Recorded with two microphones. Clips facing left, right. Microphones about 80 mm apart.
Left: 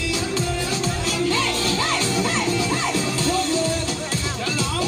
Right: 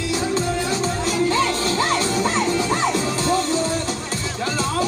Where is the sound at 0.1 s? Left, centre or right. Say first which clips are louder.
Right 4 dB; right.